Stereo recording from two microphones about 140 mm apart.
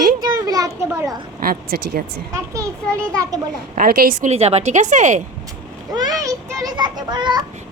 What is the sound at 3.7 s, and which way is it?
Speech, 90° right.